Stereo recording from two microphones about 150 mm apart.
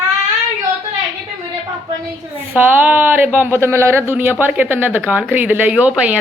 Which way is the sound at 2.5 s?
10° right (ahead or behind).